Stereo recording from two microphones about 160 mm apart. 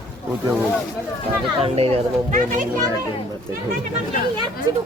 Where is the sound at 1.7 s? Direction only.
40° right (ahead or behind).